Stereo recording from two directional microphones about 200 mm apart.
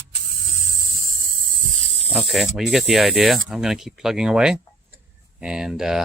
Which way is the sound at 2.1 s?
Centre (ahead or behind).